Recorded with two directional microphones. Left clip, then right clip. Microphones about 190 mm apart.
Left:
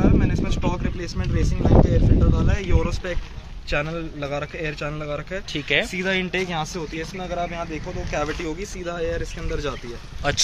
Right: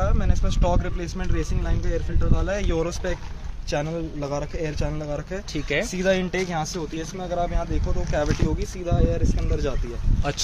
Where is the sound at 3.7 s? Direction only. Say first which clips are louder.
Left 1 dB; 30° right (ahead or behind).